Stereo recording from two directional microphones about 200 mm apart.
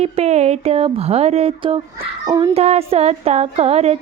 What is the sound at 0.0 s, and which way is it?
Speech, 30° right (ahead or behind).